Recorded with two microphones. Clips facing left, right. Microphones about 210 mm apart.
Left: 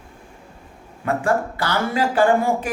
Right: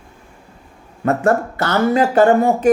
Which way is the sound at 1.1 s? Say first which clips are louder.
Right 5 dB; 45° right (ahead or behind).